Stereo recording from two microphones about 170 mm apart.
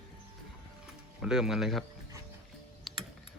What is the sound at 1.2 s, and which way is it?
Speech, 5° right (ahead or behind).